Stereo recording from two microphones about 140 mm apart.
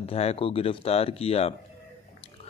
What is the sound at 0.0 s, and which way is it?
Speech, 45° left (ahead or behind).